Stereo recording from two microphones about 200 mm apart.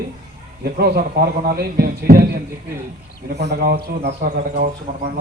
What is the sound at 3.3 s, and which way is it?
A man's voice, 55° right (ahead or behind).